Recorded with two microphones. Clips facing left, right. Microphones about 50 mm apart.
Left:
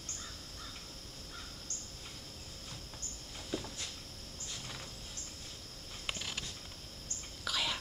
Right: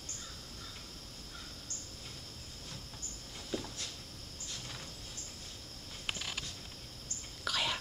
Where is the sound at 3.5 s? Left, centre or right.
Centre.